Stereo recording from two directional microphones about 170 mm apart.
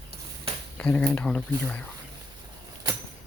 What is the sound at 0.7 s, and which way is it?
Speech, 5° left (ahead or behind).